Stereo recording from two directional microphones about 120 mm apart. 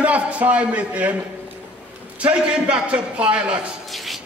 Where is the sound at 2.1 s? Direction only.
10° right (ahead or behind).